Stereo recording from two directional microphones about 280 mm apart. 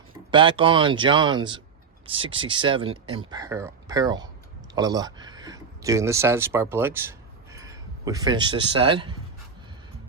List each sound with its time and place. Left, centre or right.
0.3 s speech: centre